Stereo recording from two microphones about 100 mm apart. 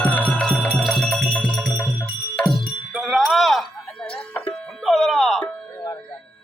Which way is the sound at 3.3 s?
Centre (ahead or behind).